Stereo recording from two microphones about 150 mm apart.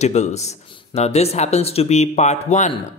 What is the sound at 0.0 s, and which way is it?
Speech, 50° left (ahead or behind).